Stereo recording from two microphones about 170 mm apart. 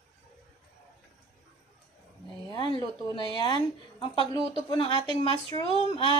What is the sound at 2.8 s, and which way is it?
A woman's voice, 25° left (ahead or behind).